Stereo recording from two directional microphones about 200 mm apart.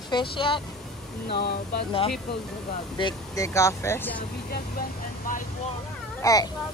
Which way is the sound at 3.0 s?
15° left (ahead or behind).